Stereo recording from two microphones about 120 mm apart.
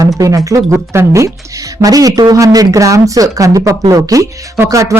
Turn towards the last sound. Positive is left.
turn(degrees=-25)  # may be behind; listen again after turning